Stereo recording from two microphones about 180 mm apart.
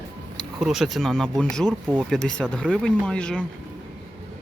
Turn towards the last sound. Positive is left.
turn(degrees=5)  # may be behind; listen again after turning